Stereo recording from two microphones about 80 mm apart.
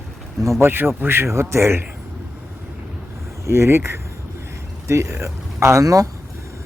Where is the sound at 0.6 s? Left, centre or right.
Right.